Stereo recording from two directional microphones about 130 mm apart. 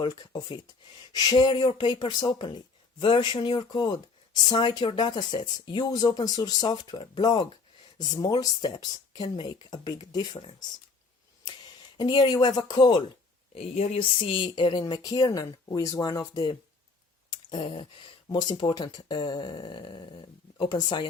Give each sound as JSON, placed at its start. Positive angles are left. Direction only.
{"t": 0.0, "sound": "speech", "side_deg": 35}
{"t": 10.3, "sound": "speech", "side_deg": 45}
{"t": 11.9, "sound": "speech", "side_deg": 35}
{"t": 13.5, "sound": "speech", "side_deg": 50}
{"t": 17.2, "sound": "a sound", "side_deg": 40}
{"t": 18.4, "sound": "speech", "side_deg": 35}